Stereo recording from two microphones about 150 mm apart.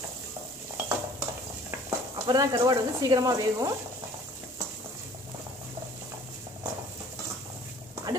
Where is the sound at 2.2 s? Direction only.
25° right (ahead or behind).